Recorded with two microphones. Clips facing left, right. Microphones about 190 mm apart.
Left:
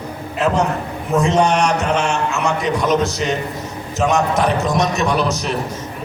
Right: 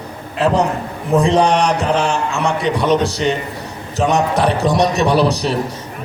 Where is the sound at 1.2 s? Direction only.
35° right (ahead or behind).